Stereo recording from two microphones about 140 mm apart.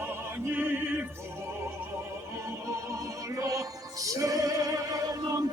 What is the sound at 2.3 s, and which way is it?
Music, 20° right (ahead or behind).